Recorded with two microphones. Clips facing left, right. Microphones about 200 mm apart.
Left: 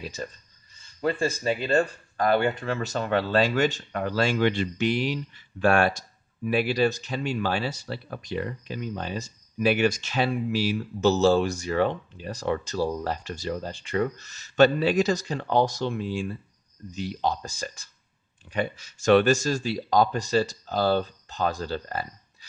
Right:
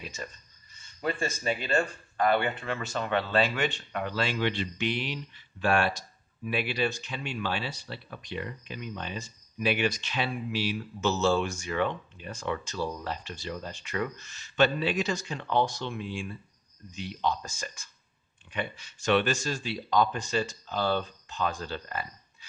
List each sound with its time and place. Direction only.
0.0 s speech: 35° left (ahead or behind)